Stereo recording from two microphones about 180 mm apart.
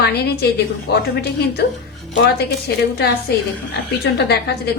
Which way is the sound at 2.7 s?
65° left (ahead or behind).